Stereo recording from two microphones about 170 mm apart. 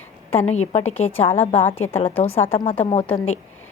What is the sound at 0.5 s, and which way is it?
A woman's voice, 40° left (ahead or behind).